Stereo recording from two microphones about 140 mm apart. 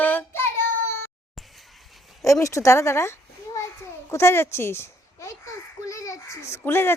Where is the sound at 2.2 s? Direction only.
20° left (ahead or behind).